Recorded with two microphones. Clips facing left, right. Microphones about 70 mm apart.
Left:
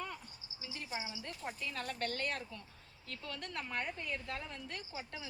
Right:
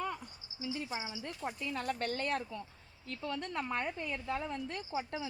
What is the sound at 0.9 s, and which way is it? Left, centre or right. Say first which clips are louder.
Speech: right 2 dB; centre.